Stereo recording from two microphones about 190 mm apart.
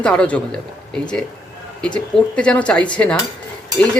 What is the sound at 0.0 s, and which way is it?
Speech, 5° left (ahead or behind).